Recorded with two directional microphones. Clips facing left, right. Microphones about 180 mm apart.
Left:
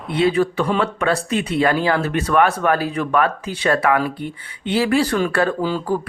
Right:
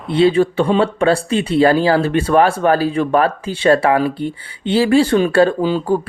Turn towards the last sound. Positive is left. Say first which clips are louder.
# right 4 dB
turn(degrees=-25)  # may be behind; listen again after turning